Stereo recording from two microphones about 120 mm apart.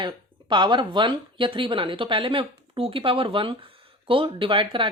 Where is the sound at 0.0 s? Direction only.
40° right (ahead or behind).